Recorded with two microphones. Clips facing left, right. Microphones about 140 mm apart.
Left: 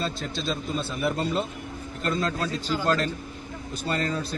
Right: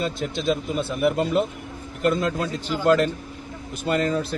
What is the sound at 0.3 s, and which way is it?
A man's voice, 55° right (ahead or behind).